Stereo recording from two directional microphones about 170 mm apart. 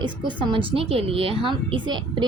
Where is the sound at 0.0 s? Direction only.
30° right (ahead or behind).